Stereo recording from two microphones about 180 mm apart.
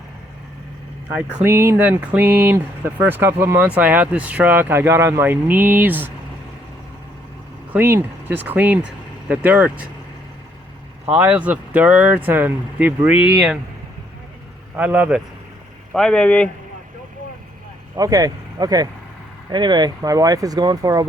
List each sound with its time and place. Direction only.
1.1 s speech: 10° right (ahead or behind)
7.7 s speech: 15° right (ahead or behind)
11.0 s speech: 10° right (ahead or behind)
14.8 s speech: 10° right (ahead or behind)
15.9 s speech: 5° left (ahead or behind)
17.9 s speech: 20° right (ahead or behind)